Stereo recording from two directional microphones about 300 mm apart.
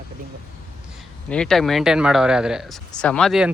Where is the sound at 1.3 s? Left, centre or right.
Centre.